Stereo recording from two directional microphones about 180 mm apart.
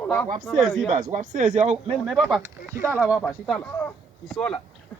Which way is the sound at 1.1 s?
40° right (ahead or behind).